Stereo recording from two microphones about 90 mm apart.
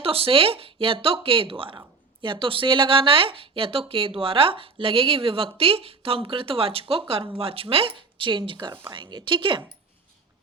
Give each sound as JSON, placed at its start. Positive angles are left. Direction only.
{"t": 0.0, "sound": "speech", "side_deg": -90}